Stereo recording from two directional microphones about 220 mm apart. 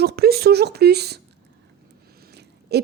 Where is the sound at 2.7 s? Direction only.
50° right (ahead or behind).